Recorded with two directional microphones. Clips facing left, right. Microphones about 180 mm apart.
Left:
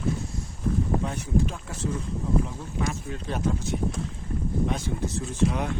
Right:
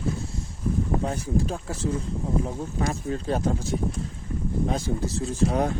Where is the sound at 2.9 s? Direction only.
35° right (ahead or behind).